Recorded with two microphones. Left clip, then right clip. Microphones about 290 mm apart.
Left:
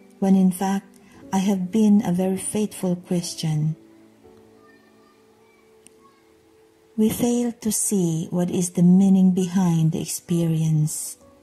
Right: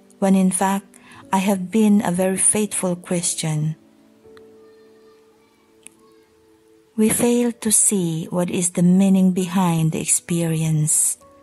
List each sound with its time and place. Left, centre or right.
0.3 s a woman's voice: right
7.0 s a woman's voice: right